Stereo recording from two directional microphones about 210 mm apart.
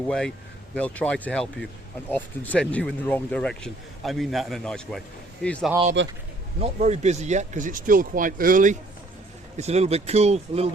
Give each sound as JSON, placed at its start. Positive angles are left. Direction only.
{"t": 0.1, "sound": "speech", "side_deg": 5}
{"t": 6.0, "sound": "a man's voice", "side_deg": -60}
{"t": 6.6, "sound": "speech", "side_deg": -30}